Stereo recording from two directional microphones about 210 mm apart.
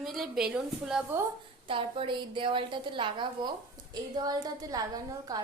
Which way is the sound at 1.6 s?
25° right (ahead or behind).